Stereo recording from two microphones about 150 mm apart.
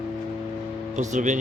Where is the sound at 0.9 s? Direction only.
55° right (ahead or behind).